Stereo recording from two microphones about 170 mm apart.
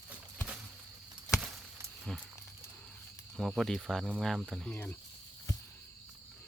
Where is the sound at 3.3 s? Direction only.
Centre (ahead or behind).